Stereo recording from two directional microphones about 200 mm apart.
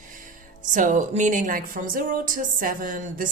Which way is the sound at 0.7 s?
40° right (ahead or behind).